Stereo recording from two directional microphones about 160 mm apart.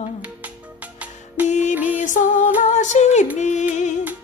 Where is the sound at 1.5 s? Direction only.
45° left (ahead or behind).